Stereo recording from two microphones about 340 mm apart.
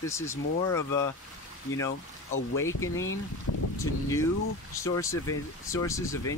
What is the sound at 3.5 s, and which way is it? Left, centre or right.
Speech, left.